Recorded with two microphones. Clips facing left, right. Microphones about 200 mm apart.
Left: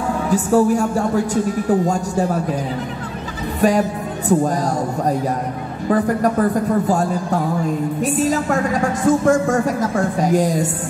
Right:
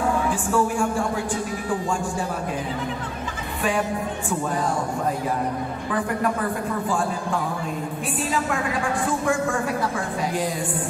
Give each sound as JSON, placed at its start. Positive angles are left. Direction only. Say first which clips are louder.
{"t": 0.3, "sound": "a woman's voice", "louder": "left 8 dB", "side_deg": 40}
{"t": 3.6, "sound": "a woman's voice", "louder": "left 7 dB", "side_deg": 40}
{"t": 5.9, "sound": "a woman's voice", "louder": "left 8 dB", "side_deg": 40}